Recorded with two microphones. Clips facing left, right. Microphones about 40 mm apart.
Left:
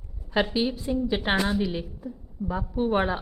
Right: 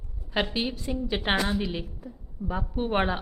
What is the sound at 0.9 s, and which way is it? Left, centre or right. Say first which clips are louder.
A woman's voice: left 2 dB; centre.